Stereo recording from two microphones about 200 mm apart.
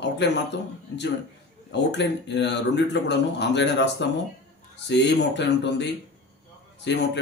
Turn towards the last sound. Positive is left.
turn(degrees=60)  # may be behind; listen again after turning